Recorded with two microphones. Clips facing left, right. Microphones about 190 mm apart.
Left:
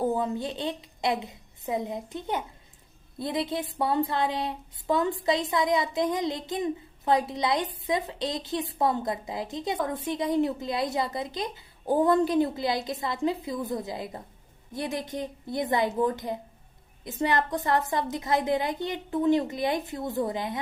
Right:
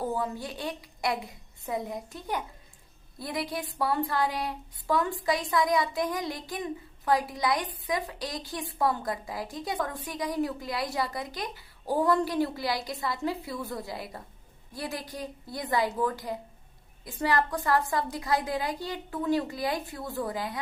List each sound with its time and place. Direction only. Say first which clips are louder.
0.0 s speech: left 4 dB; 20° left (ahead or behind)